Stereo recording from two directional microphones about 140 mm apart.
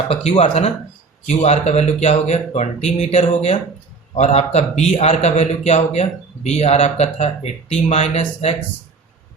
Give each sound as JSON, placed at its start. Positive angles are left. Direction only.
{"t": 0.1, "sound": "a man's voice", "side_deg": 50}